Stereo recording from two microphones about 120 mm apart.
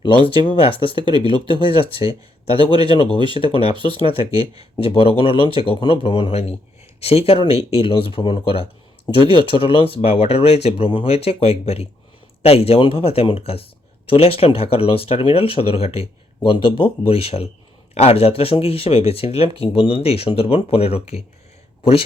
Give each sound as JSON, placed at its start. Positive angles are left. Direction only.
{"t": 0.6, "sound": "speech", "side_deg": 50}
{"t": 0.9, "sound": "speech", "side_deg": -40}
{"t": 1.5, "sound": "speech", "side_deg": 50}
{"t": 10.8, "sound": "speech", "side_deg": 50}